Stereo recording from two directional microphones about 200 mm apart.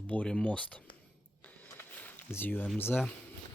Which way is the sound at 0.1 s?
5° left (ahead or behind).